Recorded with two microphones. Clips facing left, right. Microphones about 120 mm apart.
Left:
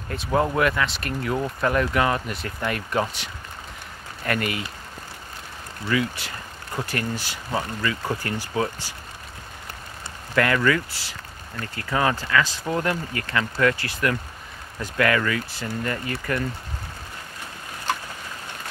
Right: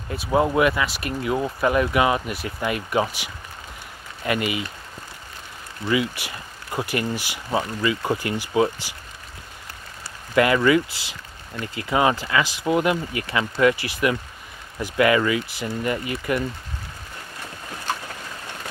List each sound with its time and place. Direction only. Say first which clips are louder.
0.1 s speech: right 2 dB; 10° right (ahead or behind)
5.9 s speech: right 2 dB; 15° right (ahead or behind)
10.3 s speech: right 4 dB; 15° right (ahead or behind)